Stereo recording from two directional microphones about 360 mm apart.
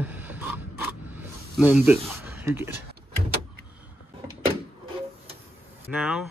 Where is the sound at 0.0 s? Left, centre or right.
Centre.